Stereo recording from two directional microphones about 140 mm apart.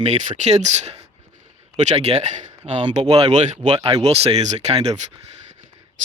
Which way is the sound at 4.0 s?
50° right (ahead or behind).